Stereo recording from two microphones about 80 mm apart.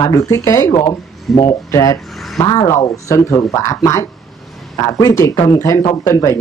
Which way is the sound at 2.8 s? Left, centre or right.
Left.